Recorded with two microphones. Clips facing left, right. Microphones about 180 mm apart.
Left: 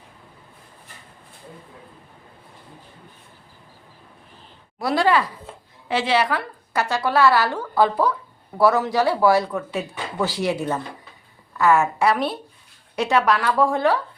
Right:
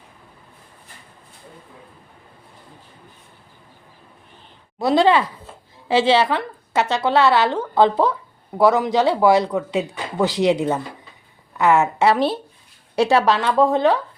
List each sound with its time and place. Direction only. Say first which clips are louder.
4.8 s a woman's voice: right 4 dB; 25° right (ahead or behind)